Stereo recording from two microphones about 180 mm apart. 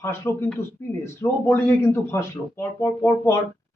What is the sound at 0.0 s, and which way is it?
A man's voice, 15° left (ahead or behind).